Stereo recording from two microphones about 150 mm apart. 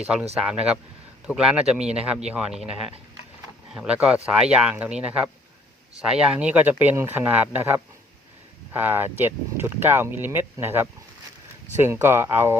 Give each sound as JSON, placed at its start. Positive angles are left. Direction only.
{"t": 0.3, "sound": "speech", "side_deg": -5}